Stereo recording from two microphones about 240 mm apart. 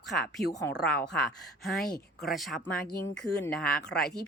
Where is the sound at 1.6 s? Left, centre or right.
Centre.